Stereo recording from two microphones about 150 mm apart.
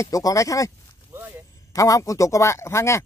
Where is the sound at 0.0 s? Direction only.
20° left (ahead or behind).